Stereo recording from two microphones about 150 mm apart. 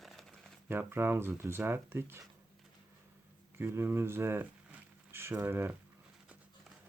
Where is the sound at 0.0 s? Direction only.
Centre (ahead or behind).